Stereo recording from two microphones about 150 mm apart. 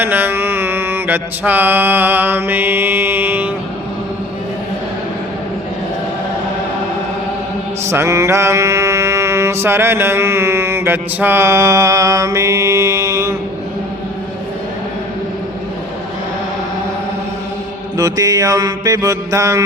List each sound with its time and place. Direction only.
0.0 s mantra: 15° right (ahead or behind)
7.9 s mantra: 20° right (ahead or behind)
17.9 s mantra: 25° right (ahead or behind)